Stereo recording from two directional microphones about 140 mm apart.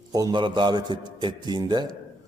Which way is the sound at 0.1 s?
25° right (ahead or behind).